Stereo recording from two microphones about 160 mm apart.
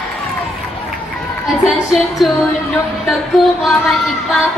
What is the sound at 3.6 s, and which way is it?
Speech, centre (ahead or behind).